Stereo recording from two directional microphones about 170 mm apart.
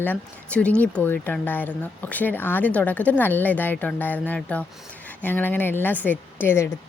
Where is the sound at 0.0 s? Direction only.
10° left (ahead or behind).